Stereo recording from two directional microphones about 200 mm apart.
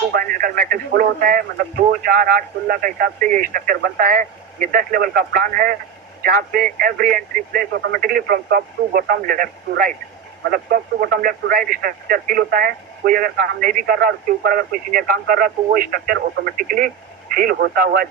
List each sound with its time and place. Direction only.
0.1 s speech: 45° right (ahead or behind)